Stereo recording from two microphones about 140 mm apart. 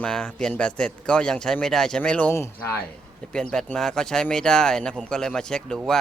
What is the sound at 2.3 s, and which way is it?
Speech, 20° left (ahead or behind).